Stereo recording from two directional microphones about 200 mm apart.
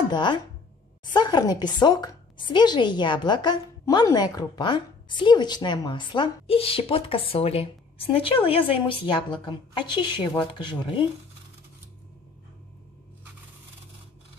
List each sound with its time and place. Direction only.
0.1 s speech: 20° left (ahead or behind)